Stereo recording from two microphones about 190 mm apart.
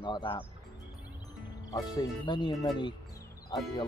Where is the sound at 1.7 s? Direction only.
20° left (ahead or behind).